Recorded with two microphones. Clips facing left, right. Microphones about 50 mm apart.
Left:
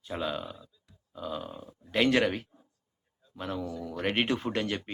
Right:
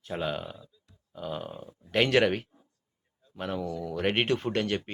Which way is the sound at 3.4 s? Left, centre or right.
Right.